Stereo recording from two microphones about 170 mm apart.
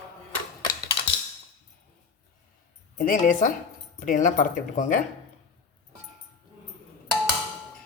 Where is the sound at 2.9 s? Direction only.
50° left (ahead or behind).